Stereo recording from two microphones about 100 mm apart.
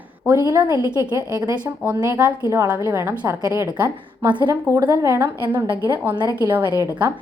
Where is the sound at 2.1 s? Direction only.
15° right (ahead or behind); by 3.6 s 30° right (ahead or behind).